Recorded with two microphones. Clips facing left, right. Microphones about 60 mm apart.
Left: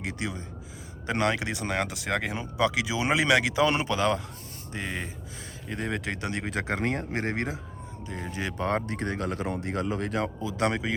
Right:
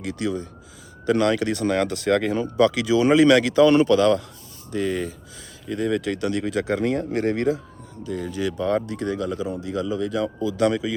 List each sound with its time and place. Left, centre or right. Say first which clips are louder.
0.0 s speech: right 7 dB; left